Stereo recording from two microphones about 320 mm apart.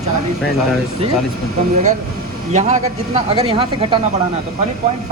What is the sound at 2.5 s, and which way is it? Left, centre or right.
Speech, right.